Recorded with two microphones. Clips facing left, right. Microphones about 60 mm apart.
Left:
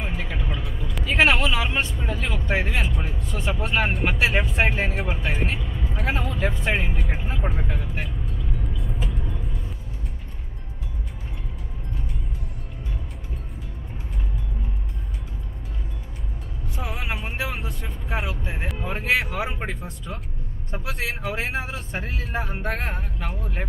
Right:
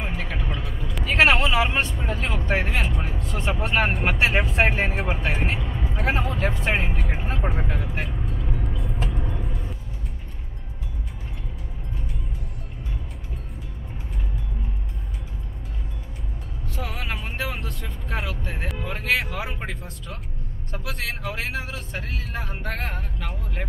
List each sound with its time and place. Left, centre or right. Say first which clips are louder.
0.0 s vehicle: even; centre
1.2 s speech: right 2 dB; centre
2.8 s speech: even; centre
3.2 s music: right 1 dB; right
3.4 s speech: right 1 dB; centre
7.2 s vehicle: right 2 dB; centre
7.4 s speech: right 1 dB; centre
8.4 s vehicle: right 1 dB; centre
8.6 s vehicle: right 1 dB; centre
16.6 s music: even; centre
17.0 s vehicle: left 1 dB; centre
18.8 s speech: left 1 dB; centre